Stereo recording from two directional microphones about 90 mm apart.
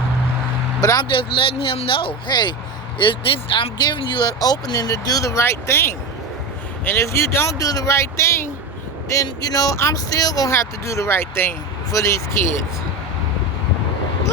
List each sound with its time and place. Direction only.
0.8 s speech: 40° left (ahead or behind)
1.1 s speech: 75° left (ahead or behind)
3.0 s speech: 70° left (ahead or behind); by 8.4 s 30° left (ahead or behind)
9.2 s speech: 45° left (ahead or behind)
10.5 s speech: 30° left (ahead or behind)